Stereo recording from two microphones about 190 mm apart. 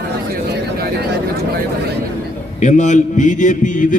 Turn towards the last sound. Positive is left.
turn(degrees=40)  # may be behind; listen again after turning